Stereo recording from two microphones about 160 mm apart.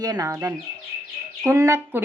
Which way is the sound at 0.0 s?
25° right (ahead or behind).